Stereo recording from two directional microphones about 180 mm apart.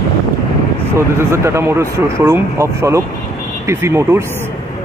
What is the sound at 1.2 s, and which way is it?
Speech, 15° right (ahead or behind).